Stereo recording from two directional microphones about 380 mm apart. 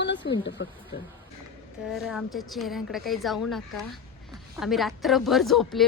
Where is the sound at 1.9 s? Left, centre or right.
Centre.